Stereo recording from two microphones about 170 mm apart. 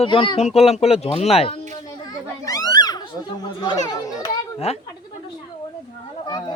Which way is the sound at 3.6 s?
25° left (ahead or behind).